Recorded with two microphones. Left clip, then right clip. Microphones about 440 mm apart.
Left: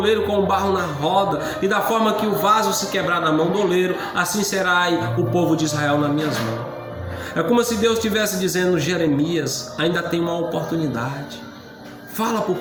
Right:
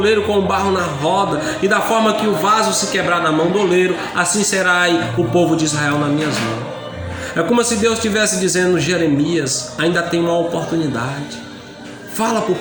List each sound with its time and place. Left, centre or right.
0.0 s a man's voice: left
7.3 s a man's voice: left
12.1 s speech: left